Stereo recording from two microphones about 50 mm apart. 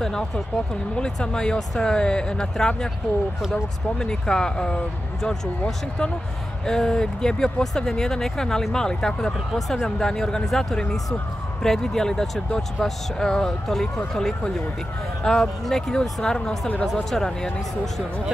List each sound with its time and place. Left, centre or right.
0.0 s speech: centre
4.0 s speech: centre
6.6 s speech: centre
9.5 s speech: centre
9.8 s speech: centre
16.8 s speech: centre